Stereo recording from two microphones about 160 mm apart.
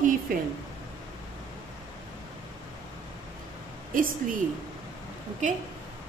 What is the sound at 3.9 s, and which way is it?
Speech, 60° right (ahead or behind).